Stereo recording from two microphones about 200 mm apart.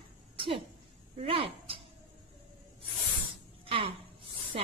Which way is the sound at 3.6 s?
25° right (ahead or behind).